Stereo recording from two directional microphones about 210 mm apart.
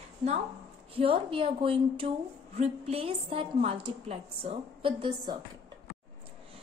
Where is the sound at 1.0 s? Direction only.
25° right (ahead or behind).